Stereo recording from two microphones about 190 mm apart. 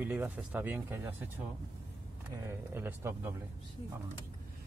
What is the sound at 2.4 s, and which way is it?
Speech, 10° right (ahead or behind).